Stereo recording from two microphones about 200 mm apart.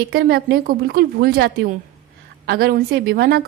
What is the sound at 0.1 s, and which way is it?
Speech, 50° right (ahead or behind).